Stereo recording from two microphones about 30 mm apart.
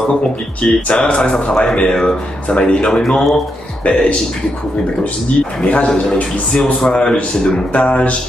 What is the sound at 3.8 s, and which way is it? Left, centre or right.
Speech, left.